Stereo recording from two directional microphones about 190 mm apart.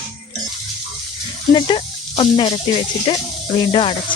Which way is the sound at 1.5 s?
25° left (ahead or behind).